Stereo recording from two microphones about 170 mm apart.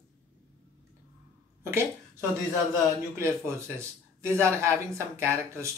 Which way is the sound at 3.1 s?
15° right (ahead or behind).